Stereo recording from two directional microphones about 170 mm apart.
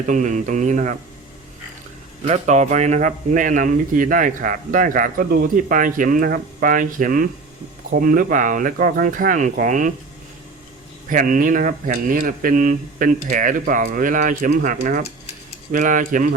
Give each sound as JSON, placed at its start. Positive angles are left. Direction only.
{"t": 0.1, "sound": "speech", "side_deg": -45}
{"t": 2.2, "sound": "speech", "side_deg": -40}
{"t": 11.1, "sound": "speech", "side_deg": -50}